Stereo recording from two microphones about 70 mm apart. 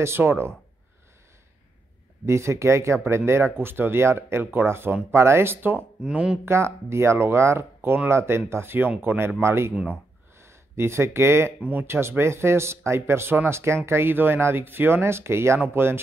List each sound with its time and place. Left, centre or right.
0.0 s speech: right
2.2 s speech: right
6.0 s speech: centre
6.4 s speech: right